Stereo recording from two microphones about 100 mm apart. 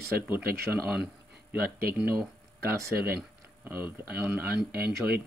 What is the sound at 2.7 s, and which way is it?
Speech, 30° right (ahead or behind).